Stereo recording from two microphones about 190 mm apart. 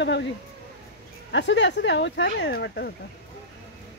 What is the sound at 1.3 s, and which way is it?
Speech, 65° left (ahead or behind).